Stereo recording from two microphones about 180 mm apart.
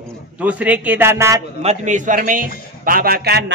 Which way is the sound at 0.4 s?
10° right (ahead or behind).